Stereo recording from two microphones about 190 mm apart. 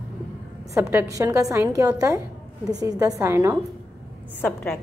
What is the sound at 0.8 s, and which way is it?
A woman's voice, 15° right (ahead or behind).